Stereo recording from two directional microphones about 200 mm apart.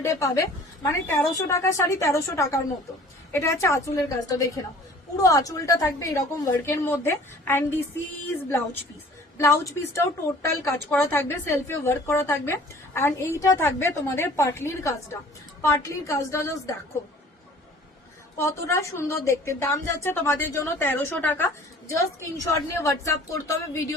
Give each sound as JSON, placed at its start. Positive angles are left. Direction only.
{"t": 0.0, "sound": "a woman's voice", "side_deg": 15}
{"t": 9.4, "sound": "a woman's voice", "side_deg": 15}
{"t": 18.3, "sound": "a woman's voice", "side_deg": 15}